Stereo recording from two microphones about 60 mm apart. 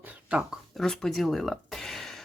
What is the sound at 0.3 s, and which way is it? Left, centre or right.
Speech, centre.